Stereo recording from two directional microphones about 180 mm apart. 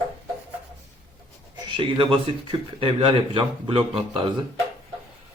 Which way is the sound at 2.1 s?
30° right (ahead or behind).